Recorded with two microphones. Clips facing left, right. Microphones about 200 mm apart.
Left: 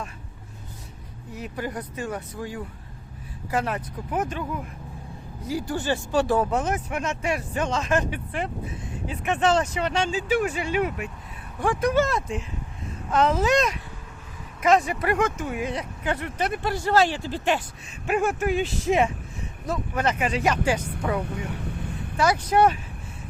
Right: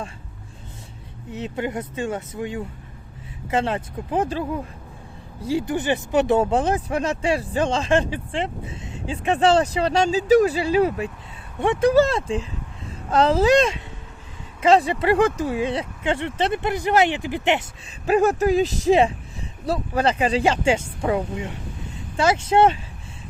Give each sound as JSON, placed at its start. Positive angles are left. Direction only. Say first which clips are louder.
{"t": 1.3, "sound": "speech", "louder": "right 5 dB", "side_deg": -25}
{"t": 18.0, "sound": "speech", "louder": "right 6 dB", "side_deg": -35}